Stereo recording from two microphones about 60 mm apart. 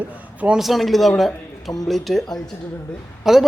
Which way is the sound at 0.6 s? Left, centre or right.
Centre.